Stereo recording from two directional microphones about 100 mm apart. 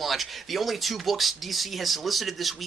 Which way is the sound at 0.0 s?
Centre (ahead or behind).